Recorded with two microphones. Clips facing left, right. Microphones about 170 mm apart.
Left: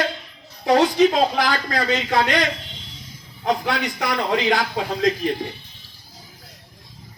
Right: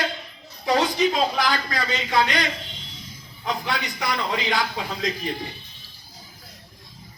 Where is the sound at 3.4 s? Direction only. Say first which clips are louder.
Left 5 dB; 50° left (ahead or behind).